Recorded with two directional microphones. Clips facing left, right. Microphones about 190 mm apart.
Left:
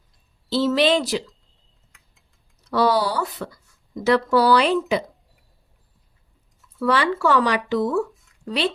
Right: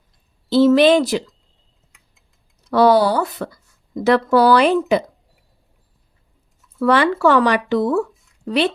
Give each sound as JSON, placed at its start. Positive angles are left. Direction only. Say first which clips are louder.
{"t": 0.5, "sound": "speech", "louder": "right 7 dB", "side_deg": -50}
{"t": 2.6, "sound": "speech", "louder": "right 6 dB", "side_deg": -55}
{"t": 6.7, "sound": "speech", "louder": "right 5 dB", "side_deg": -55}